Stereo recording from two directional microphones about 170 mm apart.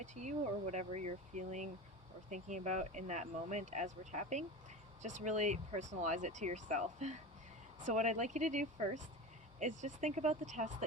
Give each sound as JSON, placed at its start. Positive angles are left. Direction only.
{"t": 0.0, "sound": "speech", "side_deg": -45}